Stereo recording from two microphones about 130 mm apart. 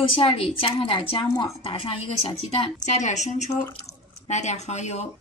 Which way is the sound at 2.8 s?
65° left (ahead or behind).